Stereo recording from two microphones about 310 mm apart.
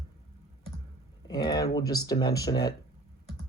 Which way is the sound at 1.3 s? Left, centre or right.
Centre.